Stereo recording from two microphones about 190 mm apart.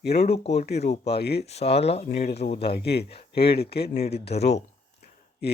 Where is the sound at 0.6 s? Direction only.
60° left (ahead or behind).